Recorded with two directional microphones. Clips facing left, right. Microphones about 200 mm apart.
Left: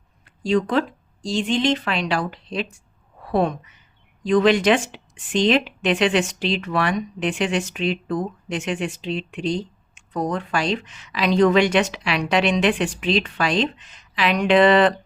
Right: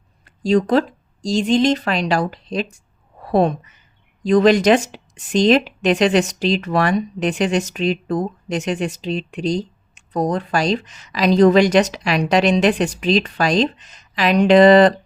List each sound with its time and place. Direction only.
0.3 s a woman's voice: 40° right (ahead or behind)